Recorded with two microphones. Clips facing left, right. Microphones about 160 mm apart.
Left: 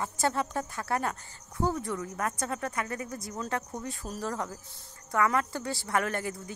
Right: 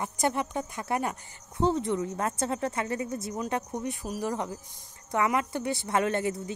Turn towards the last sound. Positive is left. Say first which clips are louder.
# right 5 dB
turn(degrees=-25)  # may be behind; listen again after turning